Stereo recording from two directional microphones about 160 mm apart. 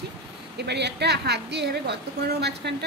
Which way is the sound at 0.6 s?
90° right.